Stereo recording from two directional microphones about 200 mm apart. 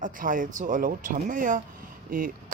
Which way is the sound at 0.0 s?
40° right (ahead or behind).